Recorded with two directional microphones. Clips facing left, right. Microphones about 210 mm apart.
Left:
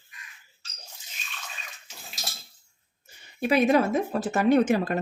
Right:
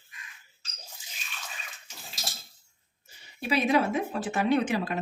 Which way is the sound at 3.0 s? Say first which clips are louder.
Left 6 dB; 50° left (ahead or behind).